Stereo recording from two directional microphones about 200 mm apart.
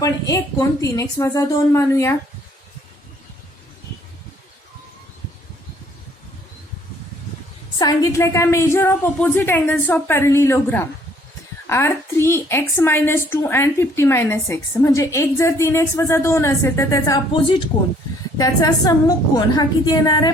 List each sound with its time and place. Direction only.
0.0 s a woman's voice: 15° left (ahead or behind)
7.8 s a woman's voice: 20° left (ahead or behind)